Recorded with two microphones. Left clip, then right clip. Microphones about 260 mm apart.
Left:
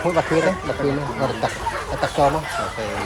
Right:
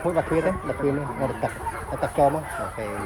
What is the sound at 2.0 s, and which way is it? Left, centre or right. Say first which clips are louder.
Speech: left 2 dB; left.